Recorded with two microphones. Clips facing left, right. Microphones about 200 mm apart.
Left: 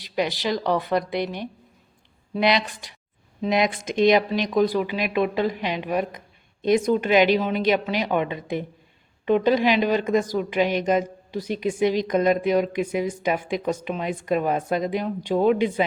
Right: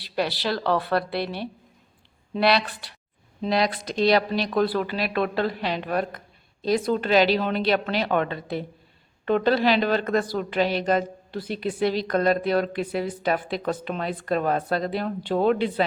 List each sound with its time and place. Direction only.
0.2 s a woman's voice: 15° left (ahead or behind)
11.3 s a woman's voice: 45° left (ahead or behind)
11.6 s a woman's voice: 15° left (ahead or behind)